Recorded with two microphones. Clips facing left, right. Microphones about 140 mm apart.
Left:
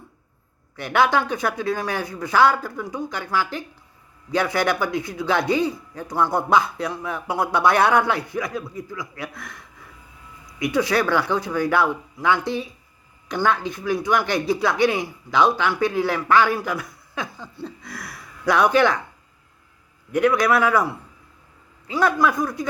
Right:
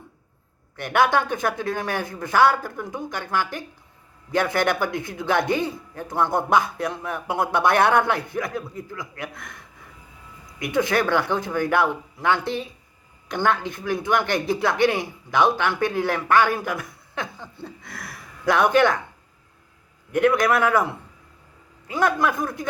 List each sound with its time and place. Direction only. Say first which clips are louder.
0.8 s a man's voice: even; 50° right (ahead or behind)
4.3 s a man's voice: even; 55° right (ahead or behind)
13.2 s a man's voice: left 1 dB; 50° right (ahead or behind)
17.6 s a man's voice: left 4 dB; 55° right (ahead or behind)
20.1 s a man's voice: left 1 dB; 55° right (ahead or behind)
22.0 s a man's voice: left 2 dB; 55° right (ahead or behind)